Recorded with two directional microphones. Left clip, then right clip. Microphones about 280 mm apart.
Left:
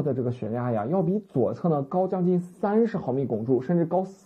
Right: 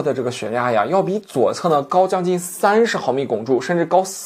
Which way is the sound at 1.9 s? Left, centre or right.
Centre.